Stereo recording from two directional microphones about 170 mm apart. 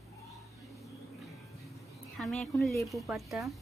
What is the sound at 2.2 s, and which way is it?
Speech, centre (ahead or behind).